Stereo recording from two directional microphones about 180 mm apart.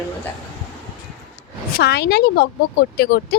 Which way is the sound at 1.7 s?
65° left (ahead or behind).